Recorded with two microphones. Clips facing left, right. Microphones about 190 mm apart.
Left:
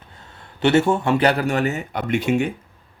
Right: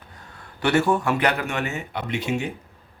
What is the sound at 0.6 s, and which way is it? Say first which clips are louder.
Speech: left 3 dB; 25° left (ahead or behind).